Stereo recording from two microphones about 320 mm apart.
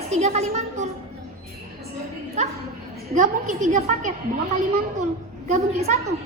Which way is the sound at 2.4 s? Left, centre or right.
Right.